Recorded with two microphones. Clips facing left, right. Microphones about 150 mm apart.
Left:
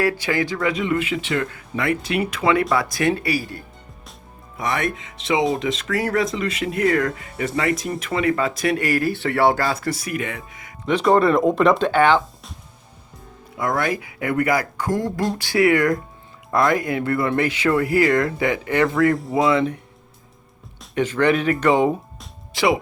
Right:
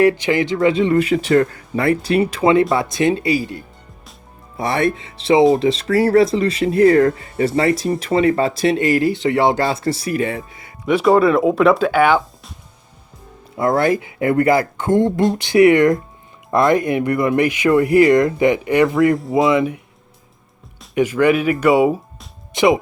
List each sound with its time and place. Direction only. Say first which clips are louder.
0.0 s speech: right 6 dB; 20° right (ahead or behind)
4.5 s speech: right 5 dB; 35° right (ahead or behind)
10.8 s speech: right 3 dB; 5° right (ahead or behind)
13.6 s speech: right 6 dB; 30° right (ahead or behind); by 19.8 s 10° right (ahead or behind)
20.9 s speech: right 4 dB; 10° right (ahead or behind)
22.5 s speech: right 5 dB; 20° right (ahead or behind)